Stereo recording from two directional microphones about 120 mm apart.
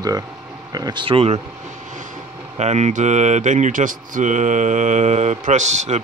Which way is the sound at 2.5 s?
70° right (ahead or behind).